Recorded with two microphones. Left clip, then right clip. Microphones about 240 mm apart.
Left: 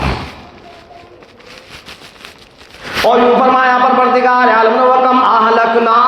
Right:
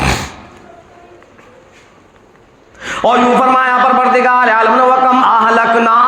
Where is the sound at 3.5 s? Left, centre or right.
Right.